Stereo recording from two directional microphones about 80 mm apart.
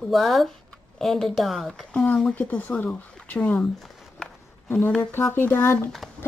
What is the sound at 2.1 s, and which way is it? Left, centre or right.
Speech, centre.